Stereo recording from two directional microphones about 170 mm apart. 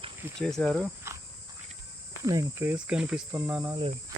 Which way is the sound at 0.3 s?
5° left (ahead or behind).